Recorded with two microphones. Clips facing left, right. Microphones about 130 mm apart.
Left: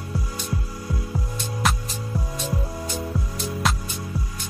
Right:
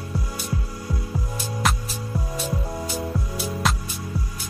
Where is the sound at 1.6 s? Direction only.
Centre (ahead or behind).